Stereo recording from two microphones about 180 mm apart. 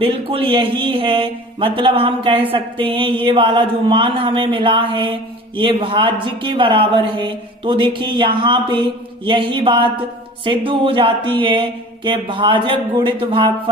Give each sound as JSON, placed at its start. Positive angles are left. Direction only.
{"t": 0.0, "sound": "speech", "side_deg": -30}